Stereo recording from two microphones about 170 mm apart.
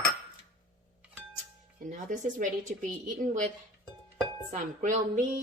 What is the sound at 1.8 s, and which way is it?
A woman's voice, 50° right (ahead or behind).